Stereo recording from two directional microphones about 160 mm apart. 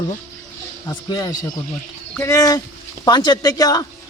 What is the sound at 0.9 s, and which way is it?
Speech, 25° left (ahead or behind).